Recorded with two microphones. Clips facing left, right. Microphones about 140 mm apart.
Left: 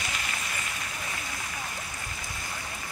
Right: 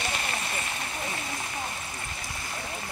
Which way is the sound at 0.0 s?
30° right (ahead or behind).